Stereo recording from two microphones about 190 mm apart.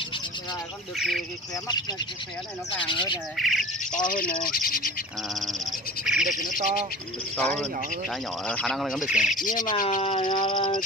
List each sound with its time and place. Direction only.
0.9 s speech: centre (ahead or behind)
1.5 s dog: 20° left (ahead or behind)
3.3 s speech: centre (ahead or behind)
3.9 s speech: 45° left (ahead or behind)
5.3 s speech: centre (ahead or behind)
7.3 s speech: 5° left (ahead or behind)
9.4 s speech: 45° left (ahead or behind)
10.0 s dog: 25° left (ahead or behind)